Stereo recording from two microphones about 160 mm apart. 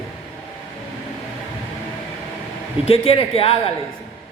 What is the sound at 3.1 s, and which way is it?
Speech, 35° left (ahead or behind).